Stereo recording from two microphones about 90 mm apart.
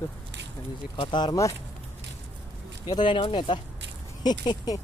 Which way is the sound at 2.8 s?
55° left (ahead or behind).